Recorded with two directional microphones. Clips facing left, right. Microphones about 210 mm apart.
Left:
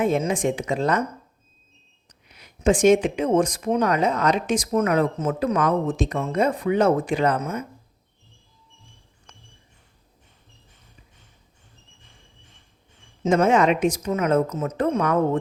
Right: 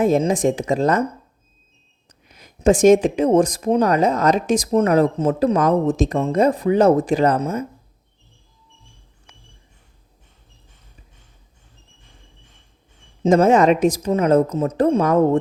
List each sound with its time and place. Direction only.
0.0 s speech: 40° right (ahead or behind)
2.2 s speech: 45° right (ahead or behind)
9.3 s a sound: 10° right (ahead or behind)
13.2 s speech: 40° right (ahead or behind)